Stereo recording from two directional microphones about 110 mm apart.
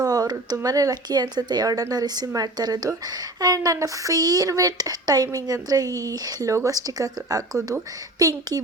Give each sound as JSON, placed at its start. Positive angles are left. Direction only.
{"t": 0.0, "sound": "speech", "side_deg": -35}